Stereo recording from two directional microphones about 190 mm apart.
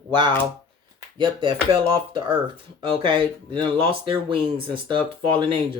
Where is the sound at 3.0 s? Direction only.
25° right (ahead or behind).